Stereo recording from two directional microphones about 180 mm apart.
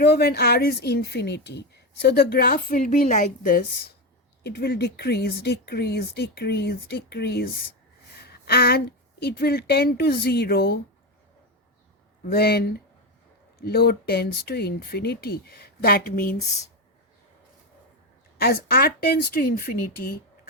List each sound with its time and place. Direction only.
0.0 s a woman's voice: 65° left (ahead or behind)
4.4 s a woman's voice: 65° left (ahead or behind)
8.2 s a sound: 60° left (ahead or behind)
9.2 s a woman's voice: 60° left (ahead or behind)
12.3 s a woman's voice: 60° left (ahead or behind)
18.3 s a woman's voice: 60° left (ahead or behind)